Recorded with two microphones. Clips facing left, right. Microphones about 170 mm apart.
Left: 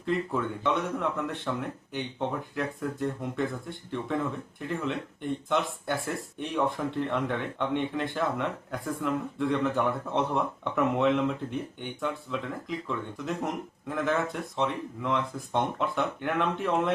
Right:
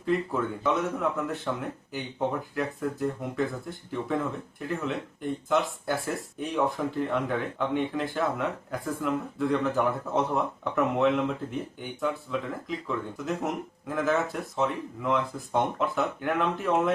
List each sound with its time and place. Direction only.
0.0 s speech: centre (ahead or behind)